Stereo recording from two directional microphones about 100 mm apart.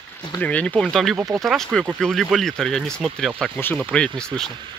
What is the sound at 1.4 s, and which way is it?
Speech, 5° left (ahead or behind).